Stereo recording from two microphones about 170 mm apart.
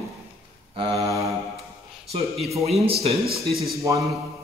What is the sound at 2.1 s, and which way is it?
Mantra, 35° right (ahead or behind).